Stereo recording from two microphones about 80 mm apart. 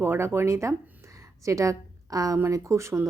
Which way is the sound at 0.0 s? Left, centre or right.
Right.